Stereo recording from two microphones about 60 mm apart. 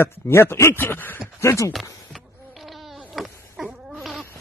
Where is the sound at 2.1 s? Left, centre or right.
Centre.